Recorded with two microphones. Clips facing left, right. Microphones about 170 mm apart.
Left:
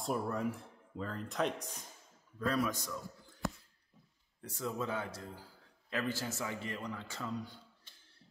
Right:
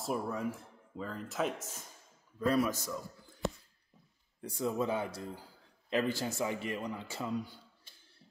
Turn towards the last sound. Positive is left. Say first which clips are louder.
# left 1 dB
turn(degrees=-10)  # may be behind; listen again after turning